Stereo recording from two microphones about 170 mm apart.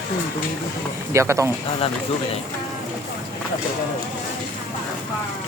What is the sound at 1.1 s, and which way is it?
Speech, 15° right (ahead or behind).